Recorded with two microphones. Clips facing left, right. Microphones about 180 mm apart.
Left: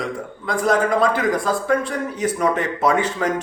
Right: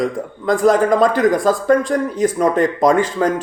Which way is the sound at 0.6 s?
Centre (ahead or behind).